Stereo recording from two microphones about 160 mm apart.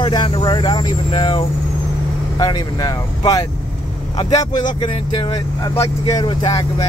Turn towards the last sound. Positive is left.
turn(degrees=25)  # may be behind; listen again after turning